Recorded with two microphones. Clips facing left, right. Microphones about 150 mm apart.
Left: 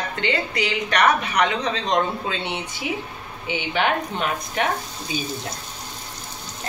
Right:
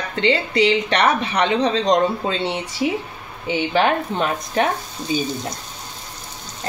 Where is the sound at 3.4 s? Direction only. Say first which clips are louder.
Right 5 dB; 35° right (ahead or behind).